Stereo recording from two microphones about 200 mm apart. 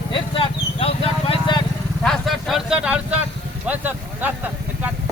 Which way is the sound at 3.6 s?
10° right (ahead or behind).